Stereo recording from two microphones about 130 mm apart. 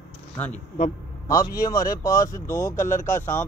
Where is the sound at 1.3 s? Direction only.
25° left (ahead or behind).